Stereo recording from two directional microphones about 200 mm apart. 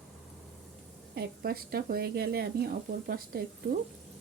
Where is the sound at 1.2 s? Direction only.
50° right (ahead or behind).